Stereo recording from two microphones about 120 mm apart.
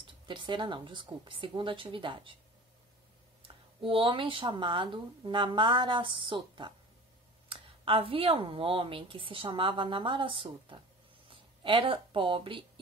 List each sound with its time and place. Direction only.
0.0 s speech: 40° right (ahead or behind)
3.4 s speech: 45° right (ahead or behind)